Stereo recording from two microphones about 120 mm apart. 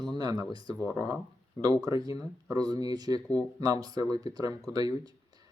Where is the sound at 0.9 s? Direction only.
20° right (ahead or behind).